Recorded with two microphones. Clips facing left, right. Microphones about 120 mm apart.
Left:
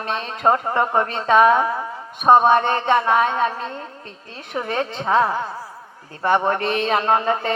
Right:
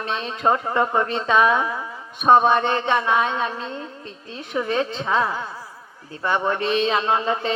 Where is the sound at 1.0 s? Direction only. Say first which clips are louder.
Left 6 dB; 40° left (ahead or behind).